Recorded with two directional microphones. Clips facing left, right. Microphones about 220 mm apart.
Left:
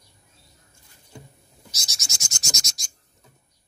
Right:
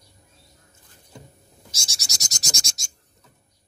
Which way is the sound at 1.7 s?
30° right (ahead or behind).